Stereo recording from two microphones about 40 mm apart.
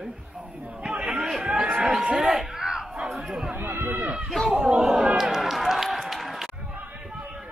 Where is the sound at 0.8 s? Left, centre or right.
Right.